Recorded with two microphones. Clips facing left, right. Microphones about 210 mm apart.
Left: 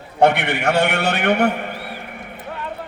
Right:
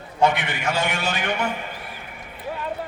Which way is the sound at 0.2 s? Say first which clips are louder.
Left 5 dB; 65° left (ahead or behind).